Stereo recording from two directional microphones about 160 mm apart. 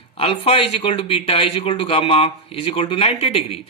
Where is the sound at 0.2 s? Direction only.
40° left (ahead or behind).